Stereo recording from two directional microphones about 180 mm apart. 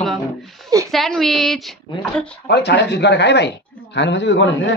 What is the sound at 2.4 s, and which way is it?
A man's voice, 70° left (ahead or behind).